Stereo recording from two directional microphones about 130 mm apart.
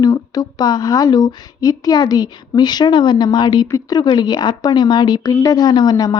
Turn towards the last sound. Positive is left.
turn(degrees=30)  # may be behind; listen again after turning